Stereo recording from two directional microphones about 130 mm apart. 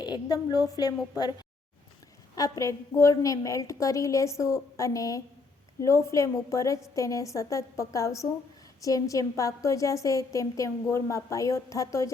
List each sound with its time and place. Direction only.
0.0 s a woman's voice: 30° left (ahead or behind)
2.3 s a woman's voice: 25° left (ahead or behind)